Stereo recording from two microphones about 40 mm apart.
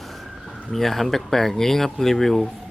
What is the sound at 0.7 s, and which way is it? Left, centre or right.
Speech, centre.